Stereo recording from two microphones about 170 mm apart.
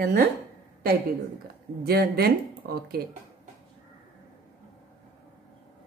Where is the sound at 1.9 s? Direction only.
65° right (ahead or behind).